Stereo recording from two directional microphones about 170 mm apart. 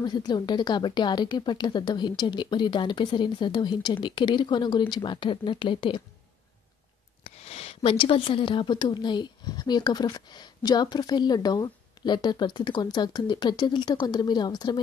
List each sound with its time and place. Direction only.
0.0 s speech: 25° left (ahead or behind)
7.2 s speech: 35° left (ahead or behind)